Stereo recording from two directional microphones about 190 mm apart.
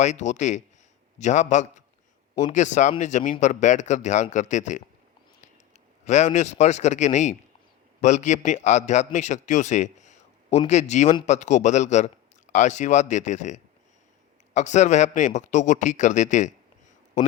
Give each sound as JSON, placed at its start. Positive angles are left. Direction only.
{"t": 0.0, "sound": "speech", "side_deg": 40}
{"t": 6.1, "sound": "a man's voice", "side_deg": 40}